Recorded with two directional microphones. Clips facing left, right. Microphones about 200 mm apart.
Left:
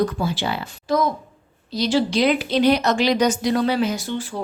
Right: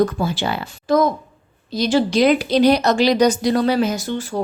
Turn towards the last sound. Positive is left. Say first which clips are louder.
# right 2 dB
turn(degrees=-45)  # may be behind; listen again after turning